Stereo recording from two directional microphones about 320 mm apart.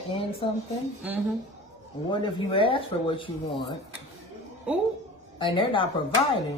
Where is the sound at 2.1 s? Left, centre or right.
Centre.